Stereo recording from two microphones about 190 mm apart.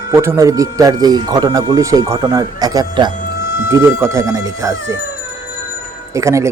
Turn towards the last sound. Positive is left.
turn(degrees=-15)  # may be behind; listen again after turning